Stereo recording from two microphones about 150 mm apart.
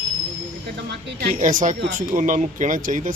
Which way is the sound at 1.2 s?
60° right (ahead or behind).